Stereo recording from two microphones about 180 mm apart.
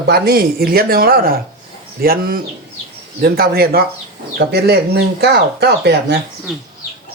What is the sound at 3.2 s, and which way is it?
Speech, 55° right (ahead or behind).